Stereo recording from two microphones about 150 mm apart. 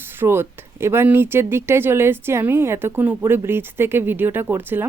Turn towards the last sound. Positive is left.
turn(degrees=-15)  # may be behind; listen again after turning